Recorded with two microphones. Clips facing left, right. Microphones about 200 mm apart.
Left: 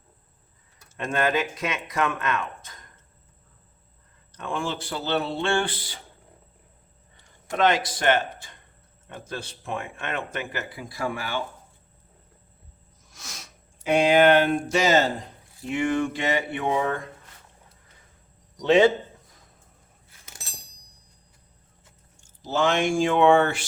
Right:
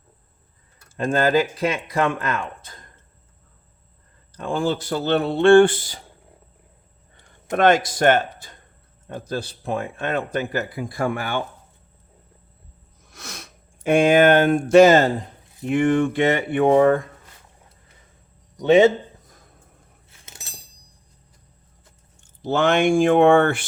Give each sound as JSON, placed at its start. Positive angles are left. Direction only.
{"t": 0.9, "sound": "speech", "side_deg": -35}
{"t": 4.4, "sound": "speech", "side_deg": -35}
{"t": 7.5, "sound": "speech", "side_deg": -50}
{"t": 13.1, "sound": "speech", "side_deg": -60}
{"t": 20.1, "sound": "a sound", "side_deg": -25}
{"t": 22.4, "sound": "speech", "side_deg": -60}